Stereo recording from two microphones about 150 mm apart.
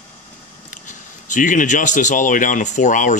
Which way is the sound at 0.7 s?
55° left (ahead or behind).